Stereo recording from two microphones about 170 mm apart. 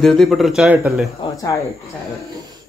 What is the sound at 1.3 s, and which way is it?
Speech, 20° left (ahead or behind).